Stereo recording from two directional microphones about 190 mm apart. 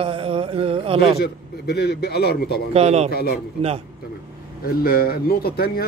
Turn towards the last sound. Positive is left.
turn(degrees=55)  # may be behind; listen again after turning